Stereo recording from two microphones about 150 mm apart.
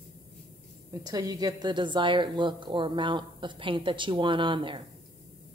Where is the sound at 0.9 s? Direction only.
25° right (ahead or behind).